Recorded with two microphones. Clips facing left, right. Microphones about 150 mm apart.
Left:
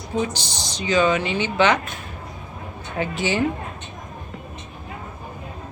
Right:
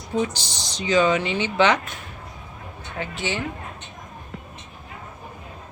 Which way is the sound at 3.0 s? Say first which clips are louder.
Left 5 dB; 5° left (ahead or behind).